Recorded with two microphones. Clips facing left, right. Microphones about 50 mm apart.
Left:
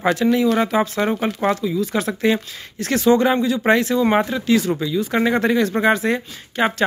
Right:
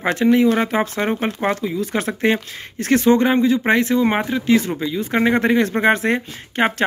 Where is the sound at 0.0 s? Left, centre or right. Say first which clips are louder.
Right 2 dB; right.